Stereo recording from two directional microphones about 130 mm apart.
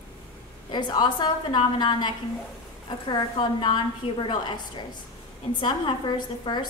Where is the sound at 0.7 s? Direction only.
35° left (ahead or behind).